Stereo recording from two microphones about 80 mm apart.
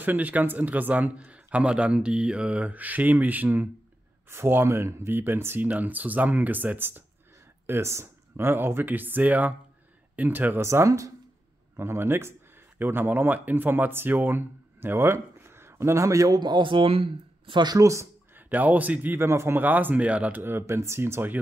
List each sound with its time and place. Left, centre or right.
0.0 s speech: right
16.3 s speech: right
17.5 s speech: right
17.7 s speech: right
18.3 s speech: right